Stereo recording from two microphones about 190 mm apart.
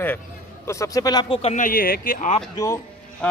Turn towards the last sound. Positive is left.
turn(degrees=5)  # may be behind; listen again after turning